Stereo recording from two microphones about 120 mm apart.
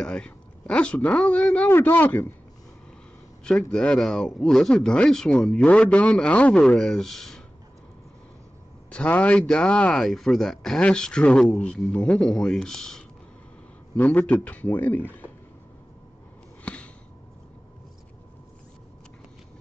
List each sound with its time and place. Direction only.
0.0 s a man's voice: 10° left (ahead or behind)
3.4 s speech: 5° left (ahead or behind)
8.9 s speech: 10° left (ahead or behind)
16.6 s a sound: 10° left (ahead or behind)